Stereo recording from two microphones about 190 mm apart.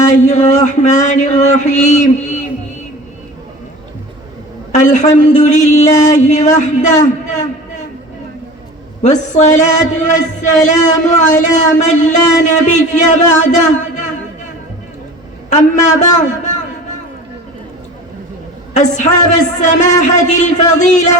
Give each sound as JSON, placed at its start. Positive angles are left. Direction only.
{"t": 0.1, "sound": "a man's voice", "side_deg": 40}
{"t": 4.7, "sound": "a man's voice", "side_deg": 40}
{"t": 9.0, "sound": "a man's voice", "side_deg": 40}
{"t": 15.4, "sound": "a man's voice", "side_deg": 40}
{"t": 18.7, "sound": "a man's voice", "side_deg": 40}